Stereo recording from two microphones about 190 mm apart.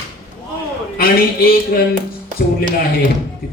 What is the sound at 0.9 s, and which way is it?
Speech, 50° left (ahead or behind).